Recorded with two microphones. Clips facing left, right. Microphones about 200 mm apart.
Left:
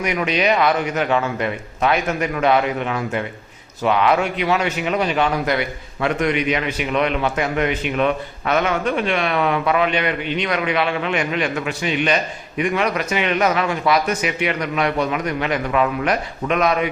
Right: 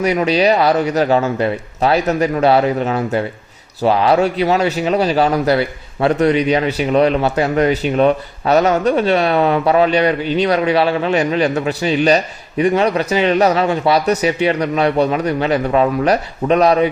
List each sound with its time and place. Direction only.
0.0 s a man's voice: 35° right (ahead or behind)